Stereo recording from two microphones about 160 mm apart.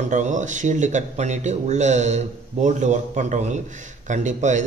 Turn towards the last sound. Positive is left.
turn(degrees=-50)  # may be behind; listen again after turning